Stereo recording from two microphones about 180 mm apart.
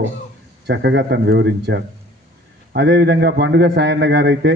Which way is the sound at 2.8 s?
75° right (ahead or behind).